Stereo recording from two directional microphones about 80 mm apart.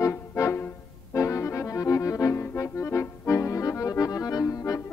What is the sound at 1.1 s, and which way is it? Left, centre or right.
Accordion, left.